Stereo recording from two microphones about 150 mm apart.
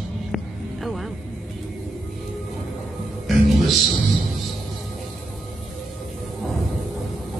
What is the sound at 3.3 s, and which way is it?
Music, centre (ahead or behind).